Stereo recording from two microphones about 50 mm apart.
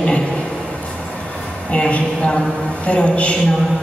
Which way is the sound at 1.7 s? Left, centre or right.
Left.